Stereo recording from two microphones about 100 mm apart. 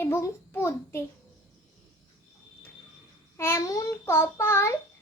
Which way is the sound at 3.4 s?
25° left (ahead or behind).